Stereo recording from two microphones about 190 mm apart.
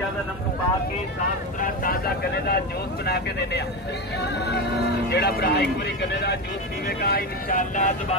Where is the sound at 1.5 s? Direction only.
45° left (ahead or behind).